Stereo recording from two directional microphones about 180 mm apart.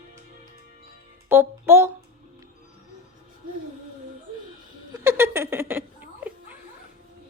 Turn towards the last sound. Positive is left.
turn(degrees=-10)  # may be behind; listen again after turning